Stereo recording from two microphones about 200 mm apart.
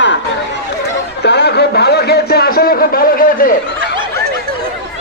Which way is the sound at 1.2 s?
55° left (ahead or behind).